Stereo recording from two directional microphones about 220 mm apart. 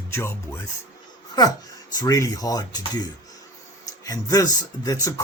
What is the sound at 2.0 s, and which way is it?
Speech, 15° left (ahead or behind).